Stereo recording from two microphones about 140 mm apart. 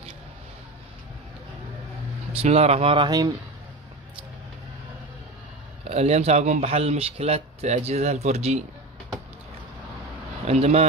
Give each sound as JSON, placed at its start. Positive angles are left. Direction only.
{"t": 2.3, "sound": "speech", "side_deg": -50}
{"t": 5.9, "sound": "speech", "side_deg": -50}
{"t": 10.4, "sound": "speech", "side_deg": -50}